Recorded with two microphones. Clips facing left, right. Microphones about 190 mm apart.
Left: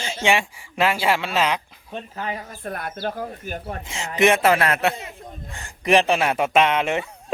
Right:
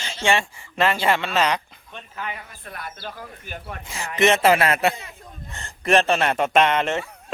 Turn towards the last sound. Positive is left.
turn(degrees=10)  # may be behind; listen again after turning